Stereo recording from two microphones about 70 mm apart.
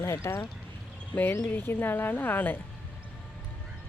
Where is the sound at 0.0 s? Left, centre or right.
Left.